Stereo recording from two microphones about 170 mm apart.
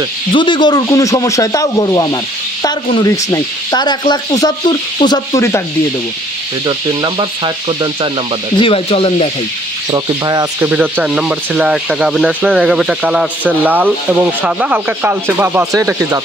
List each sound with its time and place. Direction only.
0.3 s speech: 30° left (ahead or behind)
6.6 s speech: 25° right (ahead or behind)
8.5 s speech: 35° left (ahead or behind)
9.8 s speech: 25° right (ahead or behind)
10.7 s speech: 5° right (ahead or behind)